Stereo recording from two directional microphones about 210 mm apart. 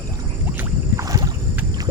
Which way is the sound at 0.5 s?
15° right (ahead or behind).